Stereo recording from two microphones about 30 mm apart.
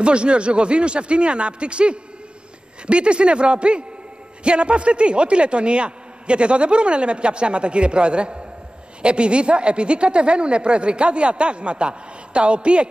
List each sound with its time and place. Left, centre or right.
0.0 s a man's voice: right